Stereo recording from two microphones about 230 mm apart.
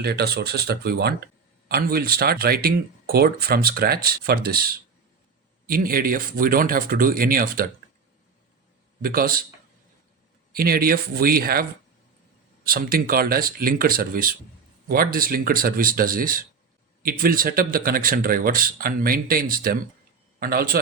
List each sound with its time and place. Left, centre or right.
0.0 s speech: right
9.0 s speech: right
10.5 s speech: right
12.6 s speech: right